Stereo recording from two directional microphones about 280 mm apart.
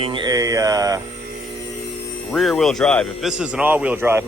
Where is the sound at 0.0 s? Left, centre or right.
Centre.